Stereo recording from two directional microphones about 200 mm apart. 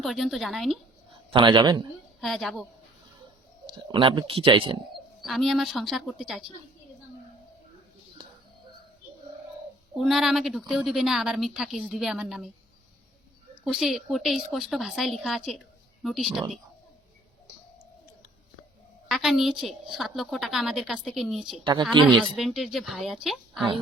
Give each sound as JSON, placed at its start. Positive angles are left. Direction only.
{"t": 0.0, "sound": "a woman's voice", "side_deg": 0}
{"t": 1.3, "sound": "speech", "side_deg": -25}
{"t": 2.2, "sound": "a woman's voice", "side_deg": 0}
{"t": 3.8, "sound": "speech", "side_deg": -25}
{"t": 5.2, "sound": "a woman's voice", "side_deg": 0}
{"t": 9.9, "sound": "a woman's voice", "side_deg": 0}
{"t": 13.7, "sound": "a woman's voice", "side_deg": 0}
{"t": 19.0, "sound": "a woman's voice", "side_deg": 0}
{"t": 21.6, "sound": "speech", "side_deg": -20}
{"t": 22.0, "sound": "a woman's voice", "side_deg": 0}